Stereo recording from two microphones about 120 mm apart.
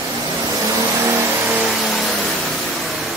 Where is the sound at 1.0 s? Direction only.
15° right (ahead or behind).